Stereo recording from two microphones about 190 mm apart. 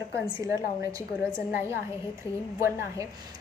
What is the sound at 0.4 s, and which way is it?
A woman's voice, 15° right (ahead or behind).